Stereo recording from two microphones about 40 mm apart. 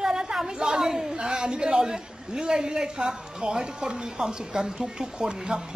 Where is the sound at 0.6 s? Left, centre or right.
Centre.